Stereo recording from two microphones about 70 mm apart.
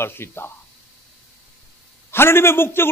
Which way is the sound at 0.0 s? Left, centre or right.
Left.